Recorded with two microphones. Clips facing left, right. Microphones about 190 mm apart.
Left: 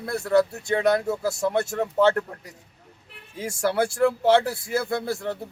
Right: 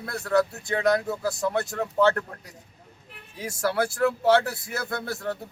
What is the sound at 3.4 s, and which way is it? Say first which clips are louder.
Speech: left 2 dB; 25° left (ahead or behind).